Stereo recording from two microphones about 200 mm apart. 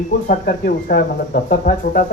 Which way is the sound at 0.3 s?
45° left (ahead or behind).